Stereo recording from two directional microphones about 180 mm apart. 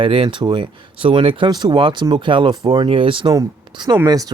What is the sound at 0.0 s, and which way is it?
Speech, 30° right (ahead or behind).